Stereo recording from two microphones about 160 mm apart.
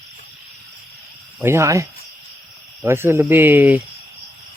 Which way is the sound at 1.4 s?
15° right (ahead or behind).